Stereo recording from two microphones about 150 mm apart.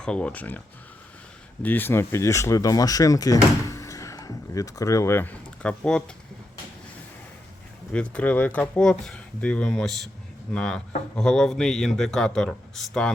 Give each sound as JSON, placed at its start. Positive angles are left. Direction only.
{"t": 0.0, "sound": "speech", "side_deg": 5}
{"t": 1.6, "sound": "speech", "side_deg": 15}
{"t": 7.9, "sound": "a man's voice", "side_deg": 10}